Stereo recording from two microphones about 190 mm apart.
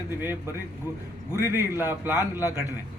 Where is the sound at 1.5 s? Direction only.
15° right (ahead or behind).